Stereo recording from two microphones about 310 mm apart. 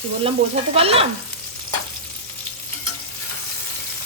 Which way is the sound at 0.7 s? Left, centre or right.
Centre.